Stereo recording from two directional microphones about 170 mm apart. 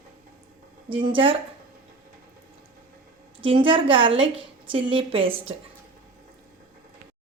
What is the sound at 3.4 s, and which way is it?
Speech, 30° right (ahead or behind).